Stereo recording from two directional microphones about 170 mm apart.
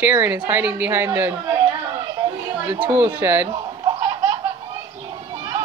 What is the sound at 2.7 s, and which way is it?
Speech, 10° right (ahead or behind).